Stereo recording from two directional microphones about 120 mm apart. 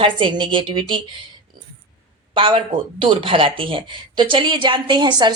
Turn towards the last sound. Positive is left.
turn(degrees=-40)  # may be behind; listen again after turning